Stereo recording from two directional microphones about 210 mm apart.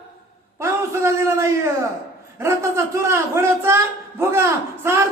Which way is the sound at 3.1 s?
10° right (ahead or behind).